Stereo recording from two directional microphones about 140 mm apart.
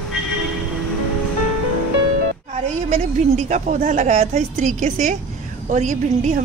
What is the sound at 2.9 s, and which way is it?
A woman's voice, 55° right (ahead or behind).